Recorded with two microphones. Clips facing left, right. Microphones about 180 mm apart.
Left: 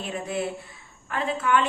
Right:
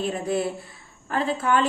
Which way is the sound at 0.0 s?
35° right (ahead or behind).